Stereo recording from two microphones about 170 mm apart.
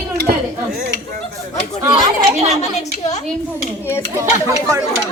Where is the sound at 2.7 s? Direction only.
45° left (ahead or behind).